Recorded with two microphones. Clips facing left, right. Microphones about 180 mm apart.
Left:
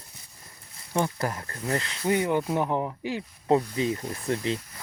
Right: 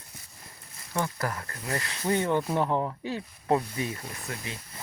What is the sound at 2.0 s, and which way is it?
Speech, 10° left (ahead or behind).